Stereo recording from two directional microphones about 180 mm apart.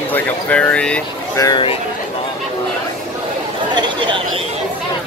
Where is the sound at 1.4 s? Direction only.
25° left (ahead or behind).